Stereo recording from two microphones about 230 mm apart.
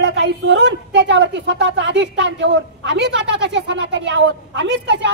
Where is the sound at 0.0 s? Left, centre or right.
Right.